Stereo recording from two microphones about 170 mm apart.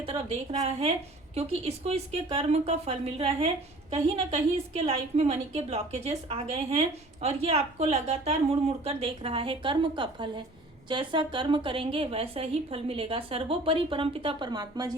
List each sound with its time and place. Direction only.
0.0 s a woman's voice: 35° right (ahead or behind)